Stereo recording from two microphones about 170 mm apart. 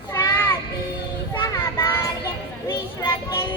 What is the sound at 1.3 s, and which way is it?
Child singing, 15° left (ahead or behind).